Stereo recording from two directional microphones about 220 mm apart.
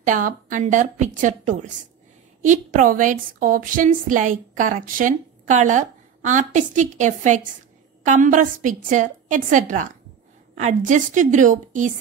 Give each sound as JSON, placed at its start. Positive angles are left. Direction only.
{"t": 0.0, "sound": "a woman's voice", "side_deg": -35}